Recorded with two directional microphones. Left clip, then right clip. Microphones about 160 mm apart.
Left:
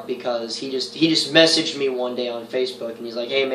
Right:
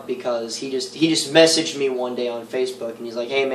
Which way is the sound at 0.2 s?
Centre (ahead or behind).